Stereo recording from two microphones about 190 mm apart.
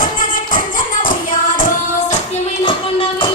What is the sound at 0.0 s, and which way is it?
Music, 45° left (ahead or behind).